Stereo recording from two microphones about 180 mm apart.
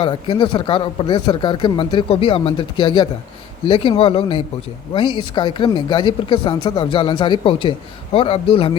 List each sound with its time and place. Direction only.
0.0 s speech: 25° left (ahead or behind)